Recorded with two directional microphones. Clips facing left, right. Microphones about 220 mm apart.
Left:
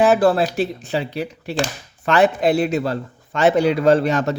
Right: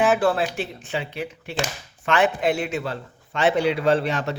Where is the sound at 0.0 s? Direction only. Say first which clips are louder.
Left 5 dB; 40° left (ahead or behind).